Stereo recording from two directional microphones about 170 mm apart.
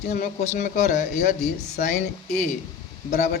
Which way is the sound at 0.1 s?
45° left (ahead or behind).